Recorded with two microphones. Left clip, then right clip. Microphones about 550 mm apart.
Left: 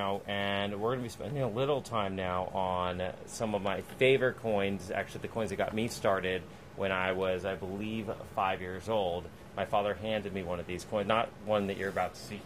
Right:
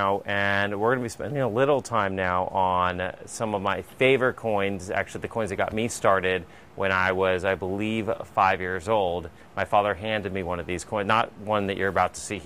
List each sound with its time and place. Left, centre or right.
0.0 s speech: right